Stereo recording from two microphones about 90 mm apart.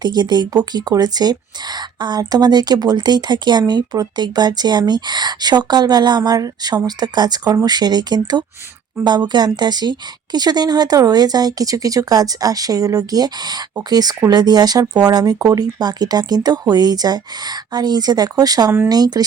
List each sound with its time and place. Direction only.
0.0 s speech: 50° right (ahead or behind)